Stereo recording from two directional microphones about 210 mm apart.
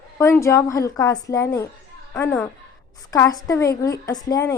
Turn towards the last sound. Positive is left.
turn(degrees=15)  # may be behind; listen again after turning